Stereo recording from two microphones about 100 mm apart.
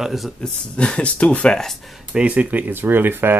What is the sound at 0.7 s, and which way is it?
Speech, 10° left (ahead or behind).